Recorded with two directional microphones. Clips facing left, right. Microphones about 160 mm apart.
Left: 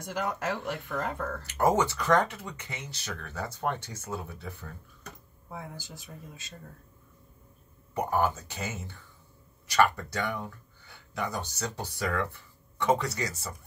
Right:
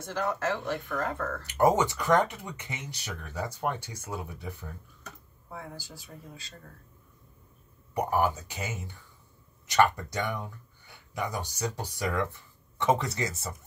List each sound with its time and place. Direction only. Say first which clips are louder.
0.0 s speech: right 2 dB; 15° left (ahead or behind)
1.4 s speech: right 2 dB; 15° right (ahead or behind)
5.5 s speech: even; 20° left (ahead or behind)
7.9 s speech: right 1 dB; 10° right (ahead or behind)